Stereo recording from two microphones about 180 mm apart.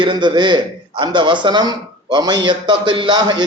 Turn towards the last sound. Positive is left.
turn(degrees=-25)  # may be behind; listen again after turning